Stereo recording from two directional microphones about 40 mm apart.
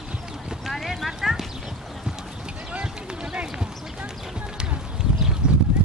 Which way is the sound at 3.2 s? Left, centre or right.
Right.